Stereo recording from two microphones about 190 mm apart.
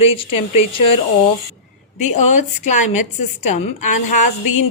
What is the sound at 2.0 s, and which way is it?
Speech, 40° left (ahead or behind).